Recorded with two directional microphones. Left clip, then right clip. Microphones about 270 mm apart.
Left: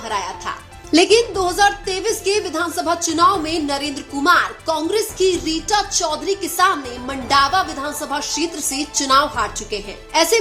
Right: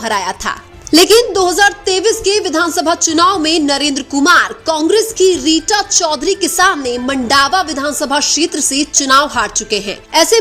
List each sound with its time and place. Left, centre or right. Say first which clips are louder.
0.1 s a woman's voice: right 6 dB; right